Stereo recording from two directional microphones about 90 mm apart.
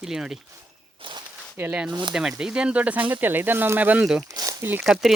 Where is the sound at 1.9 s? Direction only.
55° right (ahead or behind).